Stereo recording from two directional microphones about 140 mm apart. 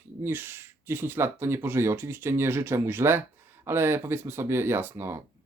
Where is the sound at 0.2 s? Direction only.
15° right (ahead or behind).